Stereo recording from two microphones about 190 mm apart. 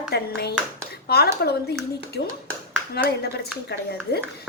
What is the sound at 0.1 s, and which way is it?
A woman's voice, 60° left (ahead or behind).